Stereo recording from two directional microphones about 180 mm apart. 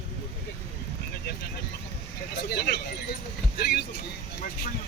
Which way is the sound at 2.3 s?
60° left (ahead or behind).